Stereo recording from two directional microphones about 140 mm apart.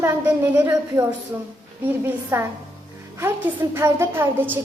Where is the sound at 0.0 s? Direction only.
15° right (ahead or behind).